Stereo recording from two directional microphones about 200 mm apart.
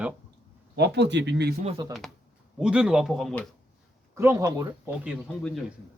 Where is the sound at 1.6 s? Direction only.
20° right (ahead or behind).